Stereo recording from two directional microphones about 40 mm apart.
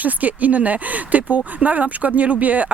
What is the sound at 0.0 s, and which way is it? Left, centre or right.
Speech, right.